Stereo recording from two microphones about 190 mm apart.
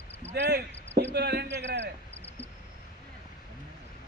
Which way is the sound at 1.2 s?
60° right (ahead or behind).